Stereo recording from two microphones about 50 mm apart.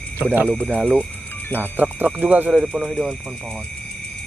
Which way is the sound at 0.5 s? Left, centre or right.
Right.